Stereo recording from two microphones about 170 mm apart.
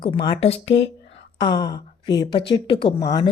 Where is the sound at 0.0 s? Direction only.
30° left (ahead or behind).